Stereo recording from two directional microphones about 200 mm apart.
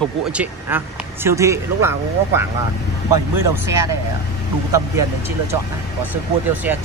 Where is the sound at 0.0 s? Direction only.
5° right (ahead or behind).